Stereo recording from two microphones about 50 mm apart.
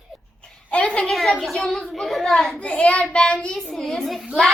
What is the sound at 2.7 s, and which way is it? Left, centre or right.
Child singing, left.